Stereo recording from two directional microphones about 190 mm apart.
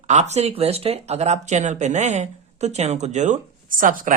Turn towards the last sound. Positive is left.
turn(degrees=-45)  # may be behind; listen again after turning